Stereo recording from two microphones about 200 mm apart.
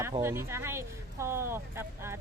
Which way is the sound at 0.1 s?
15° right (ahead or behind).